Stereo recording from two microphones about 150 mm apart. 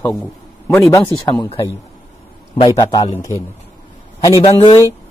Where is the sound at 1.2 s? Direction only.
30° left (ahead or behind).